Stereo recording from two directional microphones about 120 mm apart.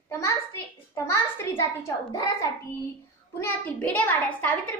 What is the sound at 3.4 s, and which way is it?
A child's voice, 15° left (ahead or behind).